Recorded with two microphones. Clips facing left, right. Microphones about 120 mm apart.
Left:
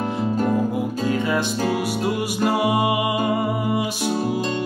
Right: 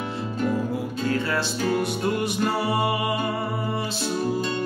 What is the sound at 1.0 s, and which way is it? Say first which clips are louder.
Music: left 3 dB; 15° left (ahead or behind).